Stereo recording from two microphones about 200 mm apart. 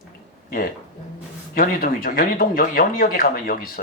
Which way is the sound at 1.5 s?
45° left (ahead or behind).